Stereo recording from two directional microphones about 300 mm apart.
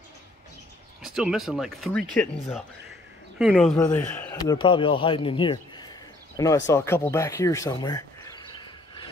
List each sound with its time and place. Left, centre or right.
1.0 s speech: centre
6.7 s bird: centre